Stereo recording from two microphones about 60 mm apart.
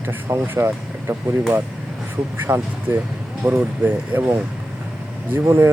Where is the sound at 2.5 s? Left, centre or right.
Right.